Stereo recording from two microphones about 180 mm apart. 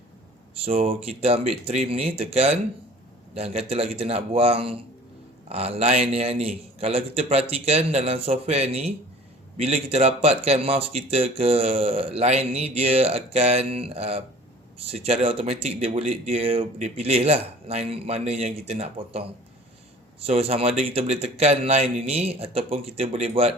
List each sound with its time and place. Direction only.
0.5 s speech: 30° right (ahead or behind)